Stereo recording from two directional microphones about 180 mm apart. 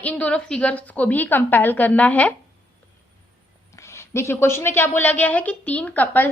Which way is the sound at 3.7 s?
15° left (ahead or behind).